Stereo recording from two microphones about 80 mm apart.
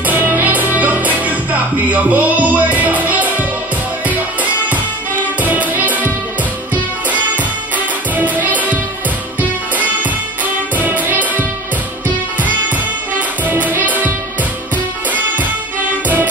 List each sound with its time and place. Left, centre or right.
0.0 s music: right
7.3 s music: right
10.4 s music: right